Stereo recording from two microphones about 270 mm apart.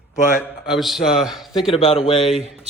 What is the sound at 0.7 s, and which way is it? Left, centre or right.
Speech, centre.